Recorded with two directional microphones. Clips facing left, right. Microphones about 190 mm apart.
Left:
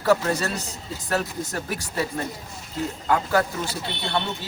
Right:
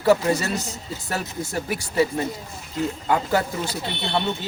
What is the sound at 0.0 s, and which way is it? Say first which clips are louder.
Speech: right 2 dB; 15° right (ahead or behind).